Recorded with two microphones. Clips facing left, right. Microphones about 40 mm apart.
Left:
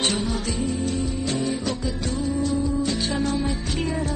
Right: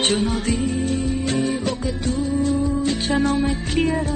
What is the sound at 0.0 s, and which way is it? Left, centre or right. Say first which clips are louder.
Music: right 4 dB; right.